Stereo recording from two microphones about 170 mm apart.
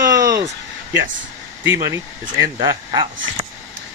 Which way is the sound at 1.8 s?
20° right (ahead or behind).